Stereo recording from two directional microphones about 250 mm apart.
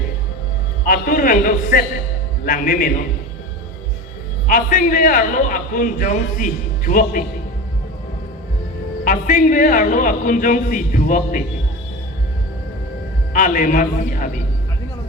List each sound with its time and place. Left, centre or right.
0.9 s a man's voice: left
4.4 s a man's voice: left
9.0 s a man's voice: left
13.3 s a man's voice: left